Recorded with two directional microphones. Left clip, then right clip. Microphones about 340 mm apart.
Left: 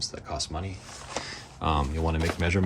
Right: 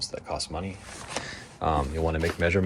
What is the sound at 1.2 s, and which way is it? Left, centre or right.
Speech, centre.